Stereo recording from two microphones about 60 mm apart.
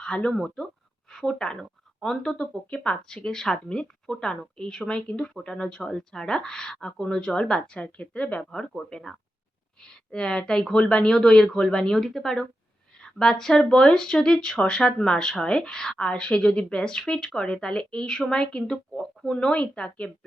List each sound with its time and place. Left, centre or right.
0.0 s speech: centre
0.3 s speech: centre
2.6 s speech: centre
8.4 s speech: centre